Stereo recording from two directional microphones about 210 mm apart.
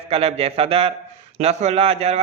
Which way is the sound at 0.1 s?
30° right (ahead or behind).